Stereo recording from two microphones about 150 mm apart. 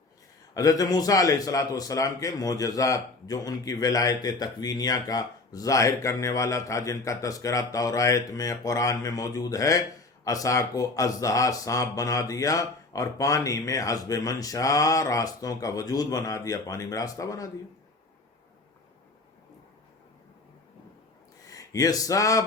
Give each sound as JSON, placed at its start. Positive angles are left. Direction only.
{"t": 0.5, "sound": "a man's voice", "side_deg": 25}
{"t": 21.4, "sound": "speech", "side_deg": 20}